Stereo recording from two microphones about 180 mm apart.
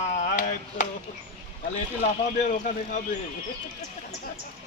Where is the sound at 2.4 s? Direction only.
45° left (ahead or behind).